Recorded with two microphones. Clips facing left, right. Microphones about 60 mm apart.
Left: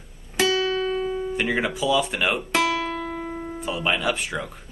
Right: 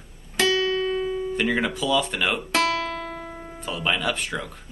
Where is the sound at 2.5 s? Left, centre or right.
Centre.